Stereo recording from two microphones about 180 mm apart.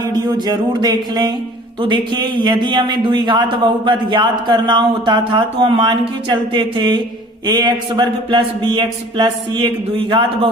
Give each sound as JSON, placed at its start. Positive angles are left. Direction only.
{"t": 0.1, "sound": "a man's voice", "side_deg": -25}